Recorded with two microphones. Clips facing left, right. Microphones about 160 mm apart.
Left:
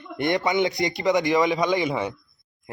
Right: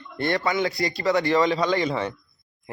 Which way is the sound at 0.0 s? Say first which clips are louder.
Left 1 dB; 15° left (ahead or behind).